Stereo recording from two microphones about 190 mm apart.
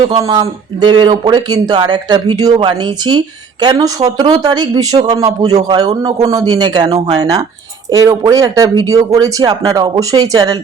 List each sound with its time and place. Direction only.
0.1 s speech: 20° right (ahead or behind)